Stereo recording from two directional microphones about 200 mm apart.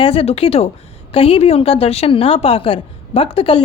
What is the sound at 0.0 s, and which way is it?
A woman's voice, 30° left (ahead or behind).